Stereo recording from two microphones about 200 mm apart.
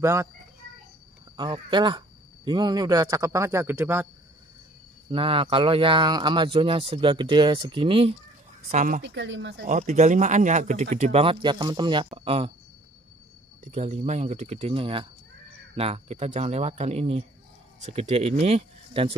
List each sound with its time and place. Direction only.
0.0 s speech: 15° right (ahead or behind)
1.3 s speech: 20° right (ahead or behind)
5.1 s speech: 25° right (ahead or behind)
8.6 s speech: 40° right (ahead or behind)
9.0 s speech: 65° right (ahead or behind)
9.7 s speech: 40° right (ahead or behind)
13.7 s speech: 35° right (ahead or behind)